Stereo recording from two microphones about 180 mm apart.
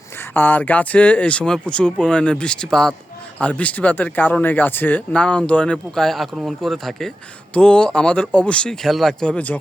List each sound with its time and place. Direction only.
0.2 s speech: 10° left (ahead or behind)